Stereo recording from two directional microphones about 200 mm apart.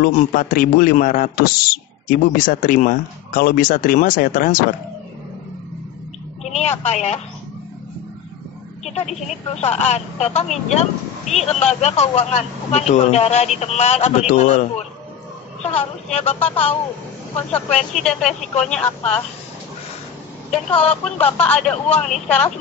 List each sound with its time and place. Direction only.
0.0 s speech: 45° left (ahead or behind)
6.4 s a woman's voice: 35° left (ahead or behind)
8.8 s a woman's voice: 35° left (ahead or behind)
15.6 s speech: 30° left (ahead or behind)
17.9 s speech: 5° left (ahead or behind)
20.5 s speech: 5° left (ahead or behind)